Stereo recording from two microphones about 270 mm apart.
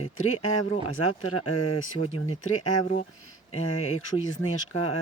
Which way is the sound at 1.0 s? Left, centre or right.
Left.